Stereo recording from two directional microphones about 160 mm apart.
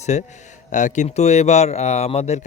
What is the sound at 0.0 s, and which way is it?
A man's voice, 45° left (ahead or behind).